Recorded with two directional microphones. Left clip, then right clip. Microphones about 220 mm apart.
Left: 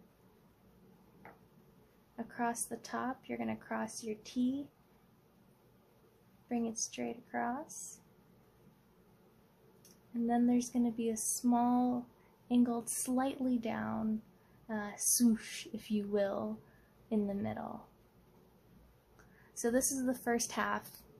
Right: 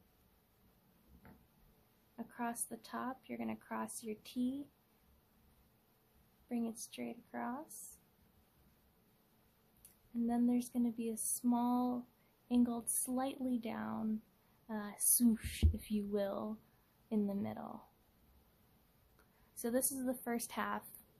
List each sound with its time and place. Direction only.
2.1 s speech: 15° right (ahead or behind)
6.5 s speech: 15° right (ahead or behind)
10.2 s speech: 15° right (ahead or behind)
19.6 s speech: 15° right (ahead or behind)